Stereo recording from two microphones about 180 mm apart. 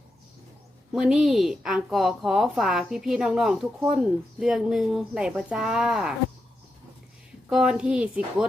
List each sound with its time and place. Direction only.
0.9 s a woman's voice: centre (ahead or behind)
7.5 s a woman's voice: 5° right (ahead or behind)